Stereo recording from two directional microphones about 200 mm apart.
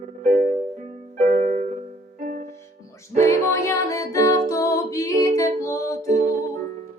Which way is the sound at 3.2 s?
15° left (ahead or behind).